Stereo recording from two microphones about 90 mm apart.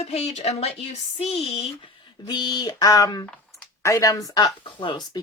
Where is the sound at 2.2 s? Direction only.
55° left (ahead or behind).